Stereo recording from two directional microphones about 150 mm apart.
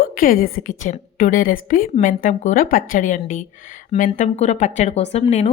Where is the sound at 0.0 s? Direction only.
75° left (ahead or behind).